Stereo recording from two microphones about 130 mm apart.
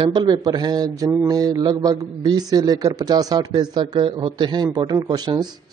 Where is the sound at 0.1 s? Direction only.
35° right (ahead or behind).